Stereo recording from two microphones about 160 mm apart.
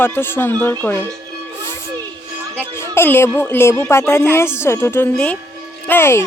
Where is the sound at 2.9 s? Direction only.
15° left (ahead or behind).